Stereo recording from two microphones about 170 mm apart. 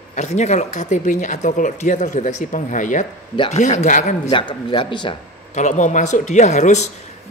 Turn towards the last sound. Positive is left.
turn(degrees=45)  # may be behind; listen again after turning